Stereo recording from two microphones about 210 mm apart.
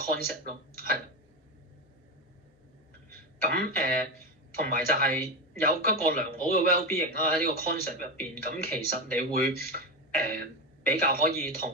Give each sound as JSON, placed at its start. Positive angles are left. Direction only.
{"t": 0.1, "sound": "speech", "side_deg": -45}
{"t": 3.4, "sound": "speech", "side_deg": -45}